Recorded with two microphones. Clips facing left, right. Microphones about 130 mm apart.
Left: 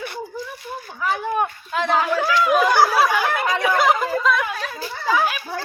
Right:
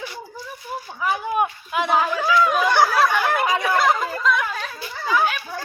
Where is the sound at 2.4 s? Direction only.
5° left (ahead or behind).